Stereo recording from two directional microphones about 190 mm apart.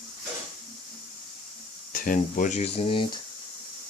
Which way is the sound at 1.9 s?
45° left (ahead or behind).